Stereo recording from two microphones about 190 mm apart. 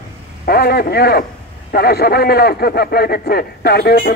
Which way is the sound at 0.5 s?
55° left (ahead or behind).